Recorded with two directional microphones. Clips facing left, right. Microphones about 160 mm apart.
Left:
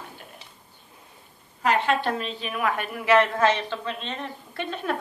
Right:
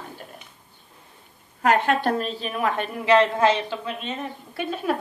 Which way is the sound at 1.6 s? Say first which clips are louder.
Right 3 dB; 50° right (ahead or behind).